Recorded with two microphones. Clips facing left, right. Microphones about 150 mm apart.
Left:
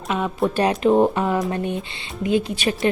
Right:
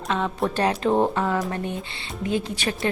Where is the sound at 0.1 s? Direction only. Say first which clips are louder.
Left 3 dB; 10° left (ahead or behind).